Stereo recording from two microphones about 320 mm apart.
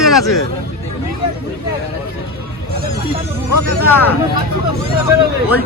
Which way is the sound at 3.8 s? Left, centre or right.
Centre.